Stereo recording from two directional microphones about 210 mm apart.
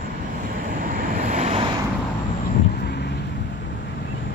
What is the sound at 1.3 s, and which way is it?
Vehicle, 30° right (ahead or behind).